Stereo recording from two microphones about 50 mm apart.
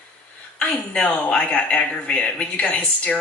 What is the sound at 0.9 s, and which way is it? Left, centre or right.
Speech, left.